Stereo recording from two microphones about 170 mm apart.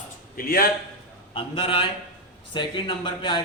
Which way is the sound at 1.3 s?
30° left (ahead or behind).